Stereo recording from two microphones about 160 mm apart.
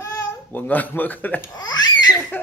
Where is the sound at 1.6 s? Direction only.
25° left (ahead or behind).